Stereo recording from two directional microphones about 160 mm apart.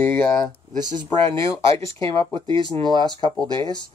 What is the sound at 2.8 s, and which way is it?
Speech, 25° right (ahead or behind).